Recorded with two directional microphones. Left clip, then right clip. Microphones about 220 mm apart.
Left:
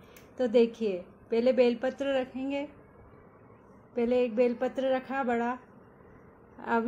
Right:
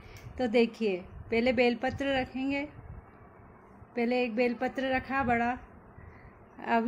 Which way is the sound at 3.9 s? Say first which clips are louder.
Left 2 dB; 15° right (ahead or behind).